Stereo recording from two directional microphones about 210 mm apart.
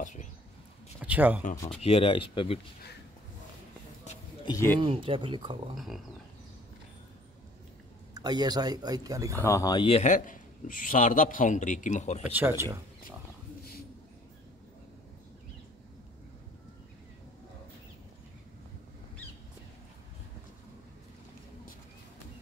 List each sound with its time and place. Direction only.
0.0 s a sound: 35° left (ahead or behind)
1.0 s speech: 5° right (ahead or behind)
1.8 s speech: 25° left (ahead or behind)
4.5 s speech: 15° left (ahead or behind)
4.7 s speech: 25° right (ahead or behind)
5.8 s pig: centre (ahead or behind)
8.1 s speech: 20° right (ahead or behind)
9.4 s a man's voice: 15° left (ahead or behind); by 12.3 s 35° left (ahead or behind)
12.3 s speech: 10° right (ahead or behind)